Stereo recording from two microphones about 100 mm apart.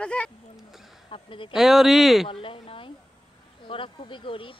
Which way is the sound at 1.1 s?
60° left (ahead or behind).